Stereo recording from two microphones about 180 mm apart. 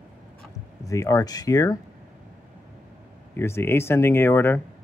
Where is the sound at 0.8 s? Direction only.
15° left (ahead or behind).